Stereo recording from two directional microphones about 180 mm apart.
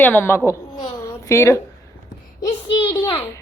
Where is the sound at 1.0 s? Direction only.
15° left (ahead or behind).